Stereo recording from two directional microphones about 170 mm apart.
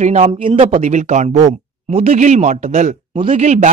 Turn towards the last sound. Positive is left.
turn(degrees=-45)  # may be behind; listen again after turning